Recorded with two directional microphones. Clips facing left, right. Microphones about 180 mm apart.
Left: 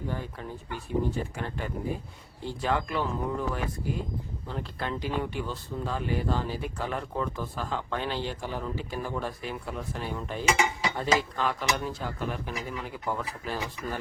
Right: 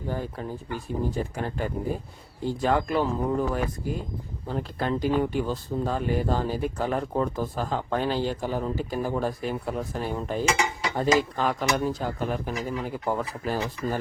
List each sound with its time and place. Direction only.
0.1 s speech: 40° right (ahead or behind)